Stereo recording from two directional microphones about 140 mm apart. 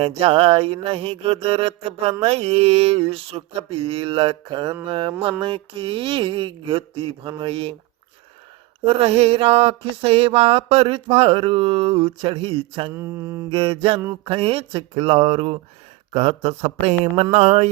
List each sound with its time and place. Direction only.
0.0 s mantra: 45° right (ahead or behind)
8.8 s mantra: 45° right (ahead or behind)
12.9 s mantra: 20° right (ahead or behind)
13.5 s mantra: 40° right (ahead or behind)